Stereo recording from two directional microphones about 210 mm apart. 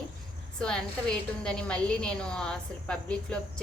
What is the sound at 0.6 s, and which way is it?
A woman's voice, 5° left (ahead or behind).